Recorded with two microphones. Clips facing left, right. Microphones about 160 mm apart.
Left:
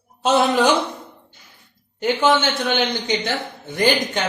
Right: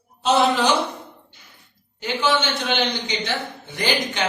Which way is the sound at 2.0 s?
50° left (ahead or behind).